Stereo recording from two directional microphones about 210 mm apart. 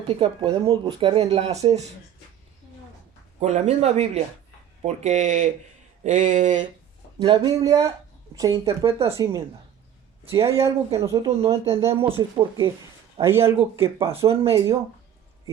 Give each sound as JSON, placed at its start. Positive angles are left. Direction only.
{"t": 0.1, "sound": "speech", "side_deg": -25}
{"t": 3.4, "sound": "a man's voice", "side_deg": -30}
{"t": 7.2, "sound": "speech", "side_deg": -20}
{"t": 9.1, "sound": "speech", "side_deg": -15}
{"t": 11.3, "sound": "speech", "side_deg": -30}
{"t": 11.7, "sound": "speech", "side_deg": -15}
{"t": 13.2, "sound": "speech", "side_deg": -10}
{"t": 14.1, "sound": "speech", "side_deg": -25}